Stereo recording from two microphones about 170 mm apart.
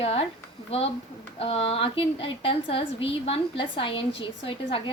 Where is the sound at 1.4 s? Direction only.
35° left (ahead or behind).